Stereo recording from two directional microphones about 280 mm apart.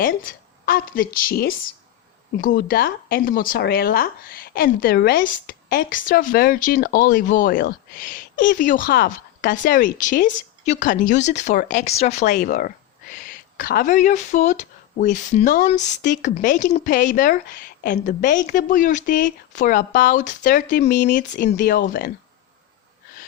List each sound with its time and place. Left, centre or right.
0.0 s a woman's voice: left